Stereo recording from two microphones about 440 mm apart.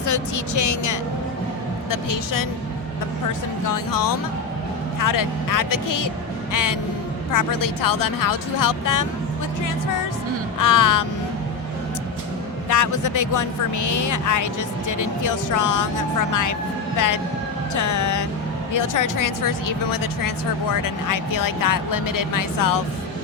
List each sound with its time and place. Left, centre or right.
0.0 s speech: left
3.7 s speech: left
10.6 s speech: left
12.6 s speech: left
17.7 s speech: left